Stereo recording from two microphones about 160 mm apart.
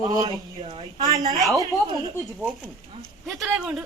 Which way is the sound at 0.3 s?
30° right (ahead or behind).